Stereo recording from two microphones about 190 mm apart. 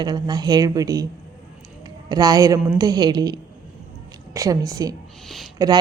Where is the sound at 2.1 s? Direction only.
20° right (ahead or behind).